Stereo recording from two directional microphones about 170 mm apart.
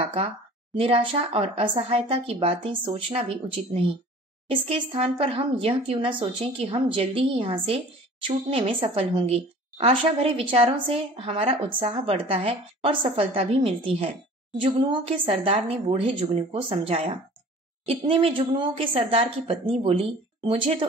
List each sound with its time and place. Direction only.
0.7 s speech: 35° right (ahead or behind)